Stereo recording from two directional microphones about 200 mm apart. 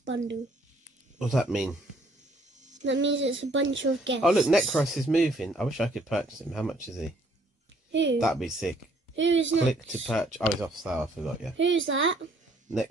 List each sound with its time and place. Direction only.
0.0 s speech: 65° right (ahead or behind)
1.1 s speech: 5° right (ahead or behind)
2.8 s a woman's voice: 65° right (ahead or behind)
4.2 s speech: centre (ahead or behind)
7.9 s a woman's voice: 65° right (ahead or behind)
8.2 s speech: centre (ahead or behind)
9.1 s a woman's voice: 70° right (ahead or behind)
9.7 s speech: centre (ahead or behind)
11.5 s a woman's voice: 70° right (ahead or behind)